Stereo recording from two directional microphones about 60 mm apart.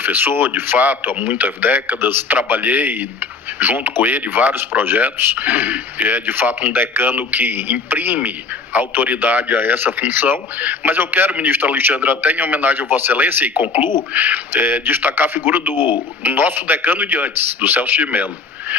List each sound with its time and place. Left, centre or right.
0.0 s a man's voice: right
11.3 s a man's voice: right
11.5 s a man's voice: right